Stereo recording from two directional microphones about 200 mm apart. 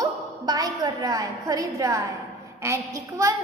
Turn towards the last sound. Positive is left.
turn(degrees=-15)  # may be behind; listen again after turning